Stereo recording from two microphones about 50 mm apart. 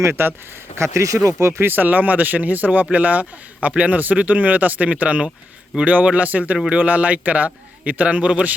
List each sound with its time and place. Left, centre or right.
0.0 s speech: right
0.9 s speech: right
1.4 s speech: right
1.6 s speech: right